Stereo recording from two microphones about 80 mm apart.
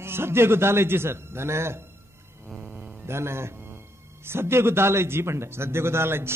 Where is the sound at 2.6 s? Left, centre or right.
Centre.